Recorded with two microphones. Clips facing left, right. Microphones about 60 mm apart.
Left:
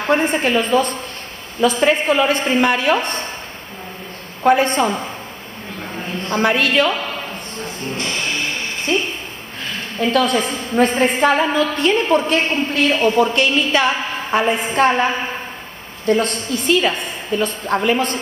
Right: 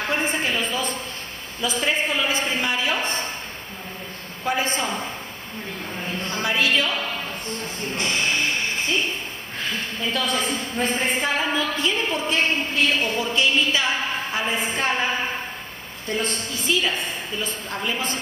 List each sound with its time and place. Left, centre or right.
0.1 s a woman's voice: left
4.4 s a woman's voice: left
6.3 s a woman's voice: left
9.9 s a woman's voice: left
16.1 s a woman's voice: left